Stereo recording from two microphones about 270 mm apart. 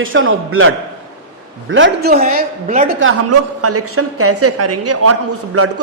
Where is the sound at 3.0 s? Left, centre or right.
Right.